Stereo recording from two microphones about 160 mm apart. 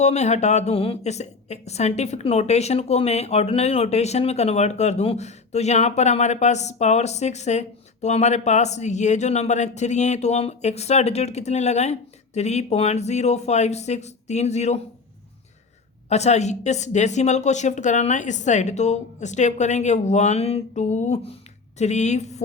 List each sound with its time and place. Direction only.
0.0 s a woman's voice: 45° left (ahead or behind)
16.0 s a woman's voice: 45° left (ahead or behind)